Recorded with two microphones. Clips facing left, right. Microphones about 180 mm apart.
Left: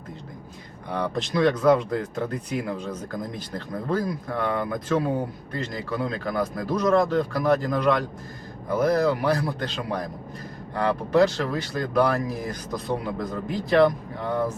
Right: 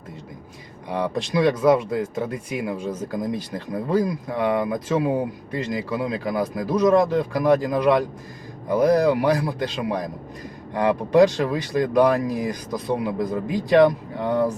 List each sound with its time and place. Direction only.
0.9 s speech: 15° right (ahead or behind)
10.8 s speech: 15° right (ahead or behind)